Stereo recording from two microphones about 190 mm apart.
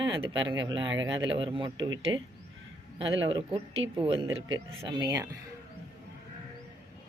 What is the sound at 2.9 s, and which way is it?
Speech, 30° right (ahead or behind).